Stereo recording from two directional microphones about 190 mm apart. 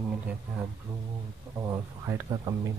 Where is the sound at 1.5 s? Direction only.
15° right (ahead or behind).